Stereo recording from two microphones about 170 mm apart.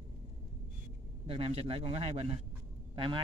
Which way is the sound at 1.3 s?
35° right (ahead or behind).